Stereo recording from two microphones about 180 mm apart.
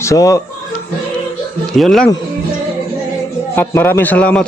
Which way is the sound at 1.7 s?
Centre (ahead or behind).